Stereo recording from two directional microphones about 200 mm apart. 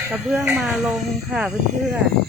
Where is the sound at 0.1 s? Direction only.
5° right (ahead or behind).